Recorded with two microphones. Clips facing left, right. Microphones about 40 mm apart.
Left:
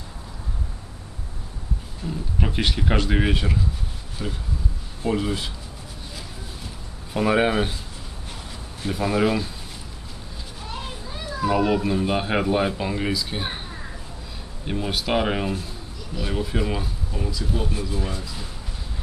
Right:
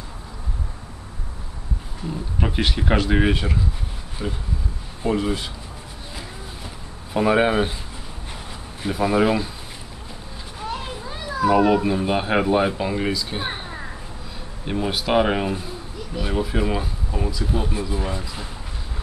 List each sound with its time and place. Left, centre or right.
2.4 s speech: centre
7.2 s speech: centre
8.8 s speech: centre
10.6 s a sound: right
11.4 s speech: centre